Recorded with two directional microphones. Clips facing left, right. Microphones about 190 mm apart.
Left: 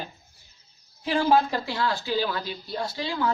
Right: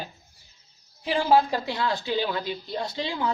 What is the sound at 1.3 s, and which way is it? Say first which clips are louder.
Speech: right 2 dB; 15° right (ahead or behind).